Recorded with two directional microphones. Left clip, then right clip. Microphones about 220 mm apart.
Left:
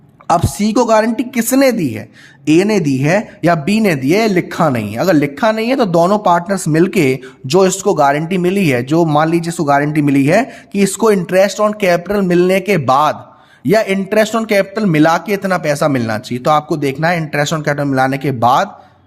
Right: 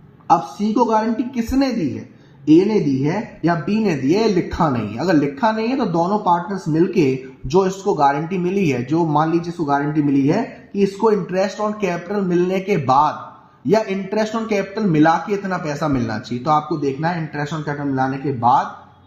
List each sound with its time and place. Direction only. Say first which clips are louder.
0.3 s a man's voice: left 3 dB; 50° left (ahead or behind)